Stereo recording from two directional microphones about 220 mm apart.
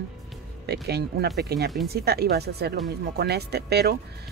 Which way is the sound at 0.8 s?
45° right (ahead or behind).